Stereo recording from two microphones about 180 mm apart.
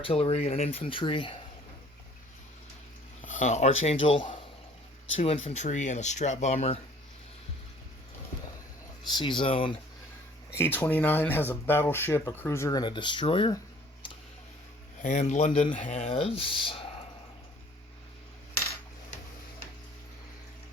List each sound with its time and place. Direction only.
0.0 s speech: 35° left (ahead or behind)
3.2 s a sound: 40° left (ahead or behind)
3.8 s speech: 30° left (ahead or behind)
9.0 s speech: 25° left (ahead or behind)
10.8 s speech: 10° left (ahead or behind); by 13.6 s 30° left (ahead or behind)
15.0 s speech: 40° left (ahead or behind)